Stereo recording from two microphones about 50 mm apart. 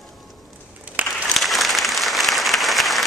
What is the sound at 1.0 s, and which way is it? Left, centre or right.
Applause, right.